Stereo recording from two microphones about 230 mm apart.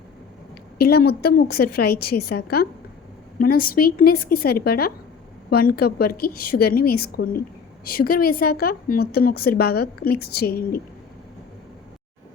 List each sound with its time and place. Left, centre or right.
0.8 s a woman's voice: left